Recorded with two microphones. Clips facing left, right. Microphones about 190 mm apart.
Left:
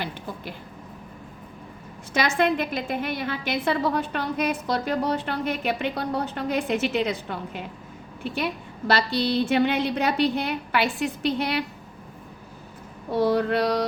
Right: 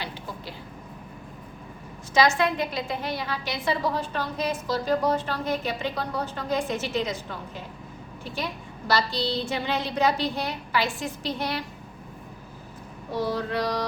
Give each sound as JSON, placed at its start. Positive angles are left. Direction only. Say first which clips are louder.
{"t": 2.1, "sound": "a woman's voice", "louder": "even", "side_deg": 55}
{"t": 8.9, "sound": "a woman's voice", "louder": "left 3 dB", "side_deg": 60}
{"t": 13.1, "sound": "a woman's voice", "louder": "left 6 dB", "side_deg": 60}